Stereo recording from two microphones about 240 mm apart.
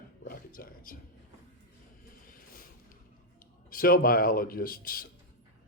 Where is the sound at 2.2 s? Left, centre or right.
Left.